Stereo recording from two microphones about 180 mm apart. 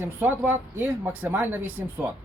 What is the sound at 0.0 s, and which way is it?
A man's voice, 10° right (ahead or behind).